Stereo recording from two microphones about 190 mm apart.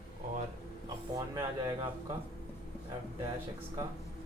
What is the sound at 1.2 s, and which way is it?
Speech, 20° right (ahead or behind).